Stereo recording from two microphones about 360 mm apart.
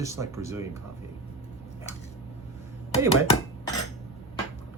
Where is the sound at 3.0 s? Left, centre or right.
Centre.